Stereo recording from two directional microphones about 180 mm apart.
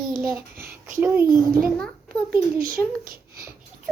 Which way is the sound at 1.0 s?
10° right (ahead or behind).